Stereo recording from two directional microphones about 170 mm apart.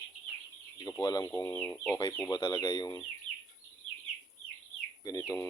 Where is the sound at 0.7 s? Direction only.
20° left (ahead or behind).